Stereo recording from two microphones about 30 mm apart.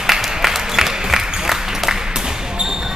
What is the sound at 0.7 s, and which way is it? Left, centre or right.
Applause, centre.